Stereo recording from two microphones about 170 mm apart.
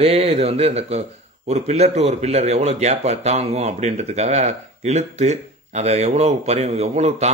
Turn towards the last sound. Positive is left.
turn(degrees=-40)  # may be behind; listen again after turning